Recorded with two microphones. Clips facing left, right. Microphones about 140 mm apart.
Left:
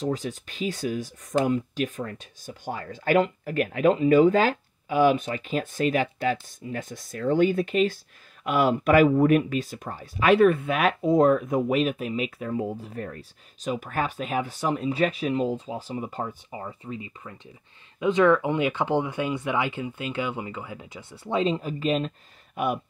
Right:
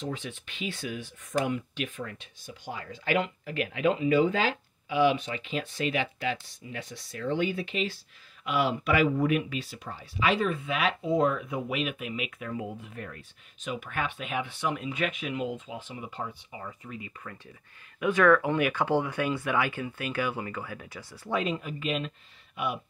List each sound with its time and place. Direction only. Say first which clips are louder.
0.0 s speech: left 7 dB; 40° left (ahead or behind)
22.6 s speech: left 5 dB; 45° left (ahead or behind)